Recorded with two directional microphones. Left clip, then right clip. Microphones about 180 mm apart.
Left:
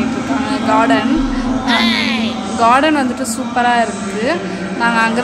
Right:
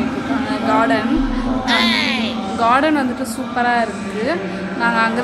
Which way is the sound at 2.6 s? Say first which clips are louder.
Left 3 dB; 10° left (ahead or behind).